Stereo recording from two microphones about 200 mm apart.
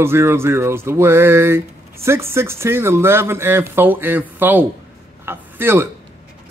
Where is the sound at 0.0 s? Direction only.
10° right (ahead or behind).